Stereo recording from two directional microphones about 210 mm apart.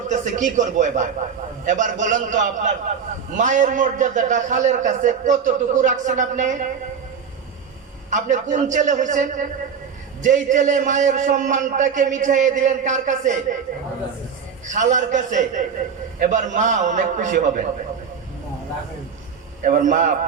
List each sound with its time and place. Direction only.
0.1 s a man's voice: 35° right (ahead or behind)
8.1 s a man's voice: 35° right (ahead or behind)
14.7 s a man's voice: 35° right (ahead or behind)
19.6 s a man's voice: 35° right (ahead or behind)